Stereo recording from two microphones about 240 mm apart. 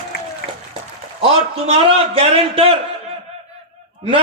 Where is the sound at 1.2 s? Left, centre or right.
Right.